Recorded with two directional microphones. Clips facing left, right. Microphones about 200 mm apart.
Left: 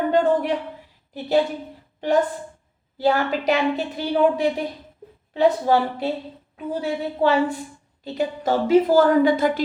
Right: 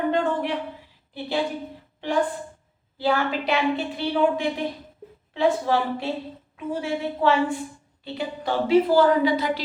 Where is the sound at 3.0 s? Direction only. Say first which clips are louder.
Left 3 dB; 40° left (ahead or behind).